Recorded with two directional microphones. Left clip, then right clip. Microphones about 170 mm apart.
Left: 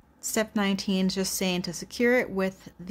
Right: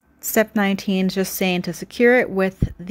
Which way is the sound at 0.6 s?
25° right (ahead or behind).